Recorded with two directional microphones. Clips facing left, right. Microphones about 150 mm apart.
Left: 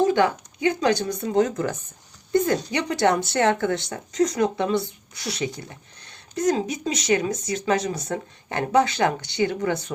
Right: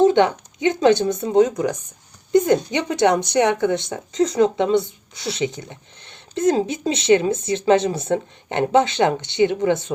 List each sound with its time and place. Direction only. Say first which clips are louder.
0.0 s speech: right 5 dB; 25° right (ahead or behind)